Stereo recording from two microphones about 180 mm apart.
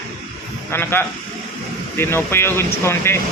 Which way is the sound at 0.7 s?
10° left (ahead or behind).